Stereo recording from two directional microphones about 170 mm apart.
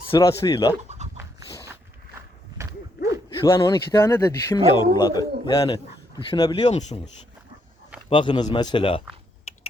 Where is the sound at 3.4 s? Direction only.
25° left (ahead or behind).